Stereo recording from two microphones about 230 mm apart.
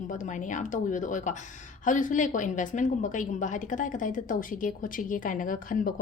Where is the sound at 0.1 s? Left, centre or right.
Left.